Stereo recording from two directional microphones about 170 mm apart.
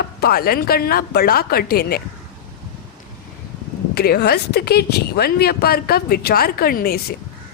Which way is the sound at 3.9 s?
65° left (ahead or behind).